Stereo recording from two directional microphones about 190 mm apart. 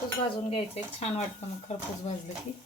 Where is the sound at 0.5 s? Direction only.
30° left (ahead or behind).